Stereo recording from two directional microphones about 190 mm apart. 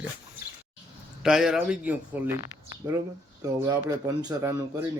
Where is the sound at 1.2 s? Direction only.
Centre (ahead or behind).